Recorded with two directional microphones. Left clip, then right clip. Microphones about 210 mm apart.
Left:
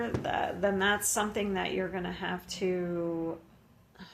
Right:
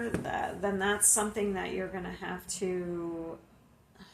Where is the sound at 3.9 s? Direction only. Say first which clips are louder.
Left 4 dB; 45° left (ahead or behind).